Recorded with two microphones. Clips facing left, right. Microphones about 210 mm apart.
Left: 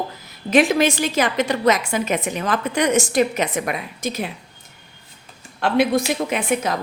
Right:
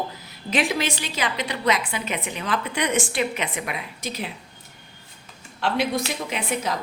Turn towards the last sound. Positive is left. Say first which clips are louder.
# left 6 dB
turn(degrees=50)  # may be behind; listen again after turning